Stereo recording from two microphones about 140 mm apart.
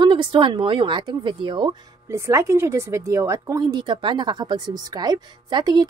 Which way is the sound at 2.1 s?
20° right (ahead or behind).